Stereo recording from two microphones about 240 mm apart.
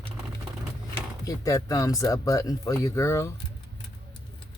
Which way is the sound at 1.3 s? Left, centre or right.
Centre.